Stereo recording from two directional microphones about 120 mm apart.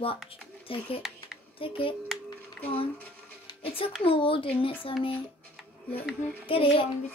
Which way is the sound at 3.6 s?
50° left (ahead or behind).